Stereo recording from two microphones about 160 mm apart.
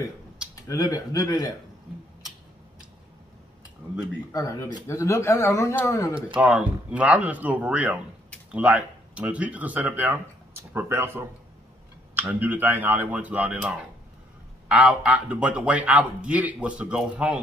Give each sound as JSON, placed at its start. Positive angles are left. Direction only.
{"t": 0.7, "sound": "speech", "side_deg": 20}
{"t": 4.3, "sound": "speech", "side_deg": 20}
{"t": 6.4, "sound": "a man's voice", "side_deg": -10}